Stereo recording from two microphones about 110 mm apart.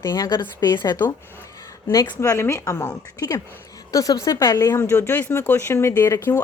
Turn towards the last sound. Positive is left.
turn(degrees=25)  # may be behind; listen again after turning